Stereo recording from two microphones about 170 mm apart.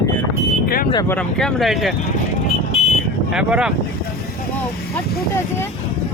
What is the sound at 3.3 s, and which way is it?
Speech, 5° right (ahead or behind).